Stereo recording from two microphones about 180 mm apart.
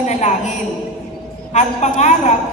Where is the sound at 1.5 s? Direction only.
40° left (ahead or behind).